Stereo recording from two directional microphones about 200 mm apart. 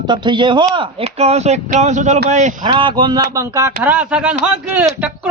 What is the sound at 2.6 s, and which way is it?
Speech, 25° right (ahead or behind).